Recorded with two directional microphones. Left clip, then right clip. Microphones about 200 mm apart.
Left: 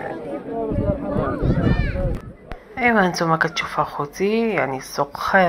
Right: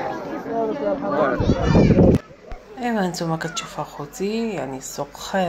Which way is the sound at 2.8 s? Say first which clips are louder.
Left 7 dB; 5° left (ahead or behind).